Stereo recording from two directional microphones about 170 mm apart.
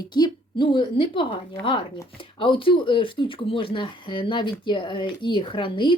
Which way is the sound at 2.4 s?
30° left (ahead or behind).